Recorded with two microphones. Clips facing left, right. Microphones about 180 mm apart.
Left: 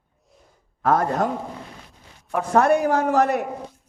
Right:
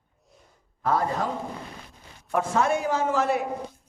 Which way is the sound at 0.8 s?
60° left (ahead or behind).